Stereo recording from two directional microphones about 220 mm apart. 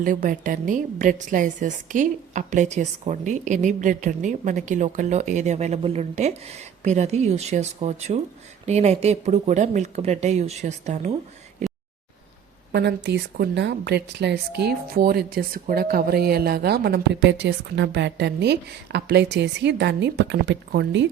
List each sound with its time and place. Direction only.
0.0 s a woman's voice: 40° right (ahead or behind)
11.6 s a sound: 30° right (ahead or behind)
12.7 s speech: 50° right (ahead or behind)